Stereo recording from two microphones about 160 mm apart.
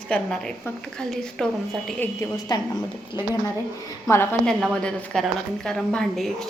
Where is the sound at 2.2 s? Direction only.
25° left (ahead or behind).